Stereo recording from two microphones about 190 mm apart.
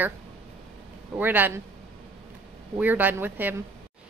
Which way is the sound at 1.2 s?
10° right (ahead or behind).